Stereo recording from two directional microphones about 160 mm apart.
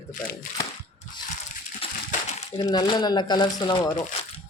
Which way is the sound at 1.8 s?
35° left (ahead or behind).